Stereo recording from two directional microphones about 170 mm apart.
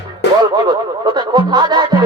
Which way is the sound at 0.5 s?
25° right (ahead or behind).